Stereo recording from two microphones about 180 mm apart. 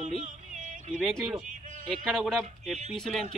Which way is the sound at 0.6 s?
45° right (ahead or behind).